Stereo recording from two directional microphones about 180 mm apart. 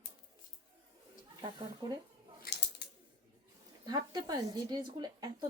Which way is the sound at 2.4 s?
65° left (ahead or behind).